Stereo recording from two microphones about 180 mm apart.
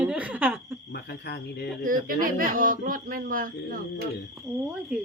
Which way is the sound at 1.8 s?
50° right (ahead or behind).